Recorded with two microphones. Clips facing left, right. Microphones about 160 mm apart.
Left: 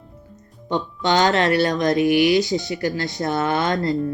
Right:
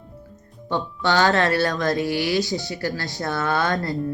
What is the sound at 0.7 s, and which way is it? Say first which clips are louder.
Speech: left 2 dB; 20° left (ahead or behind).